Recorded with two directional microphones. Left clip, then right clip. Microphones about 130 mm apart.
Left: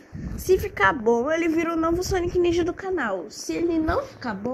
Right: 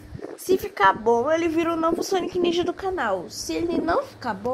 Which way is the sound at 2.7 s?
10° right (ahead or behind).